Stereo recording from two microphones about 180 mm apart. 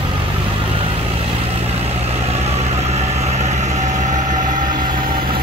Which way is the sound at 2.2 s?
35° right (ahead or behind).